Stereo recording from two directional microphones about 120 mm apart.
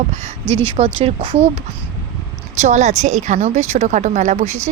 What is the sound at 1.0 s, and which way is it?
Speech, 55° right (ahead or behind).